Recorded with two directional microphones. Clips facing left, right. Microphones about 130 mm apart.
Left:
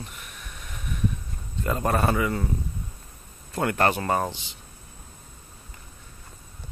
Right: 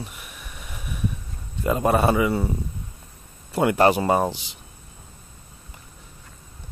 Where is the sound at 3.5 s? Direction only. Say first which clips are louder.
Right 5 dB; 15° right (ahead or behind).